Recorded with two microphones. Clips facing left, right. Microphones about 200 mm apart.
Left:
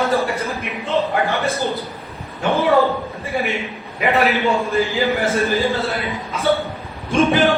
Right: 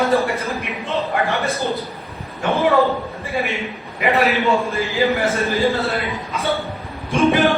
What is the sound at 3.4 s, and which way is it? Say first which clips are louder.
Speech: left 1 dB; centre (ahead or behind).